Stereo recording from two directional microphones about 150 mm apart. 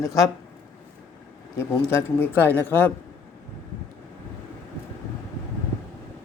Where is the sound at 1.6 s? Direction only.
15° left (ahead or behind).